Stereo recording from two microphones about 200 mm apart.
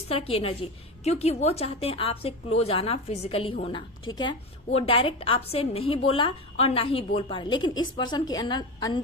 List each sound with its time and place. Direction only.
0.1 s a woman's voice: 30° left (ahead or behind)